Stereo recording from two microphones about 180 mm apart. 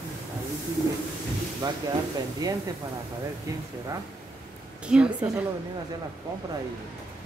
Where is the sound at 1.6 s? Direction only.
20° right (ahead or behind).